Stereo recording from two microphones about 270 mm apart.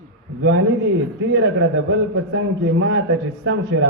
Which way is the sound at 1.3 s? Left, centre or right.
Right.